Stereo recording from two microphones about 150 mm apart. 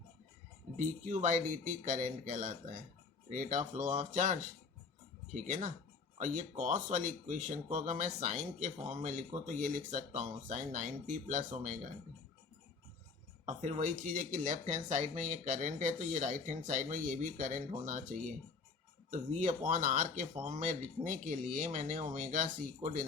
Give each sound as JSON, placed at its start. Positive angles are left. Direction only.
{"t": 0.8, "sound": "speech", "side_deg": -55}
{"t": 13.4, "sound": "speech", "side_deg": -50}